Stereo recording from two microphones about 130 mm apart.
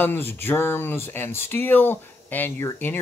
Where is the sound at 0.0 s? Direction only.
15° left (ahead or behind).